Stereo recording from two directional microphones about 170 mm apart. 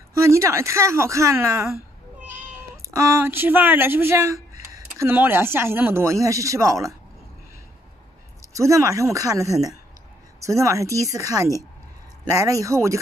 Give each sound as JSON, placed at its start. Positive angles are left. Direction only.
{"t": 0.2, "sound": "speech", "side_deg": -15}
{"t": 2.2, "sound": "cat", "side_deg": -10}
{"t": 3.0, "sound": "speech", "side_deg": -15}
{"t": 8.5, "sound": "a woman's voice", "side_deg": -20}